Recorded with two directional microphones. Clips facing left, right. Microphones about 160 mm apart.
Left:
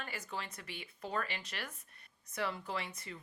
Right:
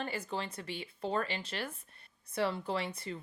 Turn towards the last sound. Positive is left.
turn(degrees=-30)  # may be behind; listen again after turning